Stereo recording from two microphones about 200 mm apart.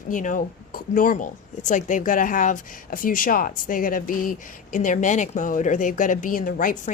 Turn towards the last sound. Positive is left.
turn(degrees=40)  # may be behind; listen again after turning